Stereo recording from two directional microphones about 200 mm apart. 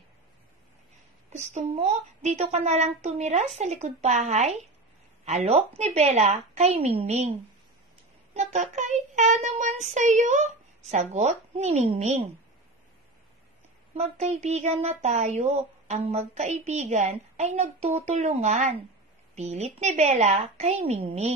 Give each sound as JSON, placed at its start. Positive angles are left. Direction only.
{"t": 1.3, "sound": "a woman's voice", "side_deg": -35}
{"t": 8.4, "sound": "child singing", "side_deg": -35}
{"t": 13.9, "sound": "a woman's voice", "side_deg": -30}